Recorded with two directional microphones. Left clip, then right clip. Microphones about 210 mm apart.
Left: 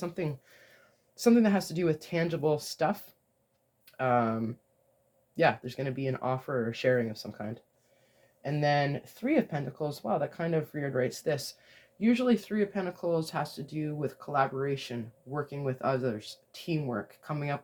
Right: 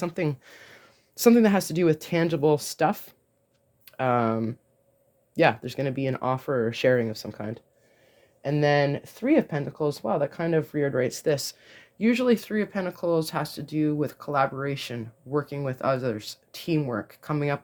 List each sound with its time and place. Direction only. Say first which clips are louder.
0.0 s speech: right 7 dB; 55° right (ahead or behind)